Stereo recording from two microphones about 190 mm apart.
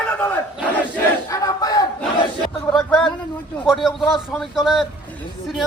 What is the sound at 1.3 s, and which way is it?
Battle cry, 20° left (ahead or behind).